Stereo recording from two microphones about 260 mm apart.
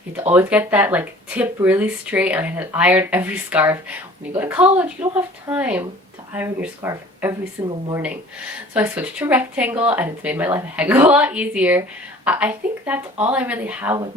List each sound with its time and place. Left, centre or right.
0.2 s speech: centre
7.7 s speech: centre
8.7 s speech: centre